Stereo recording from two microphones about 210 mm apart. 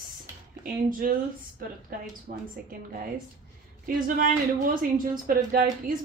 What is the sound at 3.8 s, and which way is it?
Speech, 40° right (ahead or behind).